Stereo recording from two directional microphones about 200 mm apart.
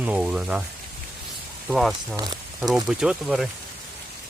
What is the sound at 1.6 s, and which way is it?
Speech, centre (ahead or behind).